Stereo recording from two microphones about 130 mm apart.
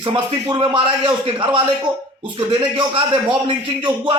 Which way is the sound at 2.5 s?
40° right (ahead or behind).